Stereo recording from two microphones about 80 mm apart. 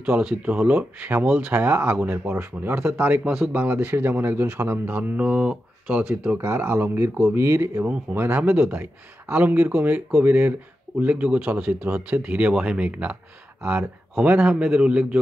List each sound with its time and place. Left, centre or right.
0.0 s speech: centre
6.4 s speech: right; by 15.1 s centre